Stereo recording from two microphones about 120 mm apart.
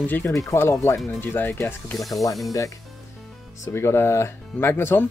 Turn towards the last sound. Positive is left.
turn(degrees=20)  # may be behind; listen again after turning